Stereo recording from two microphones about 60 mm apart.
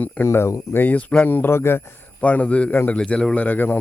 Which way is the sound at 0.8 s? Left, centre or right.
Left.